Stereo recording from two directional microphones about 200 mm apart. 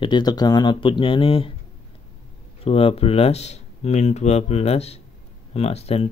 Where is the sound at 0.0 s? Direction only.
20° left (ahead or behind).